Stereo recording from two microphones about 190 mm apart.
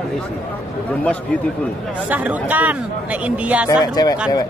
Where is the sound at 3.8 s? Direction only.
20° left (ahead or behind).